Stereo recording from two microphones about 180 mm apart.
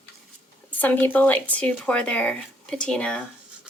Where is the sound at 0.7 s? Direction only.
10° left (ahead or behind).